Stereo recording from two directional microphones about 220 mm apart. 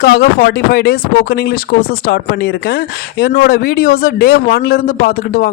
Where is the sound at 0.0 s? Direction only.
45° left (ahead or behind).